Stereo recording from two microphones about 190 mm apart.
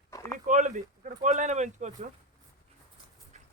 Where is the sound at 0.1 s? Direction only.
15° left (ahead or behind).